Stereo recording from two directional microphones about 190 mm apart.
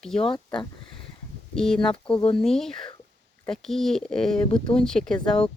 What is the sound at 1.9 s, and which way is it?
Speech, 25° left (ahead or behind).